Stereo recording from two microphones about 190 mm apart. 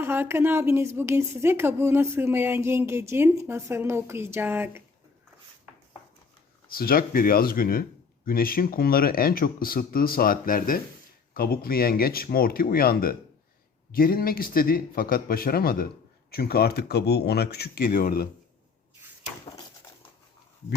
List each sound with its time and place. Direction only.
0.0 s speech: 10° right (ahead or behind)
6.7 s speech: 50° left (ahead or behind)
19.5 s a sound: 20° left (ahead or behind)